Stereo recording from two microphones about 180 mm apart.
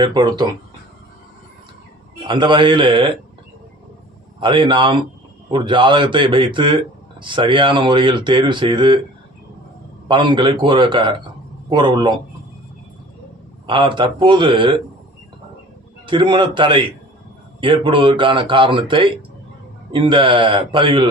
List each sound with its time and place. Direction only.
0.0 s a man's voice: 25° right (ahead or behind)
2.2 s a man's voice: 25° right (ahead or behind)
4.4 s a man's voice: 25° right (ahead or behind)
10.1 s a man's voice: 25° right (ahead or behind)
13.7 s a man's voice: 25° right (ahead or behind)
16.0 s a man's voice: 25° right (ahead or behind)